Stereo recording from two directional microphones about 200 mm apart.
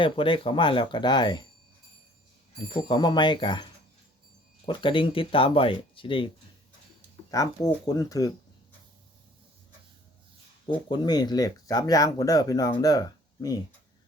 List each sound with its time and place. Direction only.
0.0 s speech: 25° left (ahead or behind)
2.7 s speech: 25° left (ahead or behind)
10.7 s speech: 25° left (ahead or behind)